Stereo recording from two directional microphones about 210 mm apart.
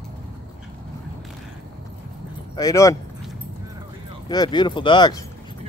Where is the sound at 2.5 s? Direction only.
15° left (ahead or behind).